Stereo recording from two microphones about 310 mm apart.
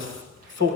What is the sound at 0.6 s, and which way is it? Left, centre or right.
Speech, right.